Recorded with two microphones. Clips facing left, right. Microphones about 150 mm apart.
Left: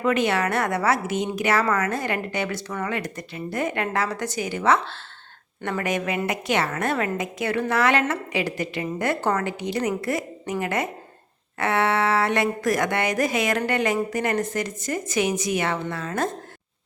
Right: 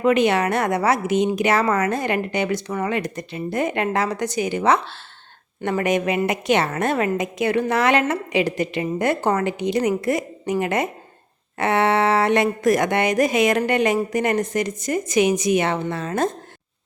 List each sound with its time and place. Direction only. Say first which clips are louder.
0.0 s a woman's voice: right 4 dB; 20° right (ahead or behind)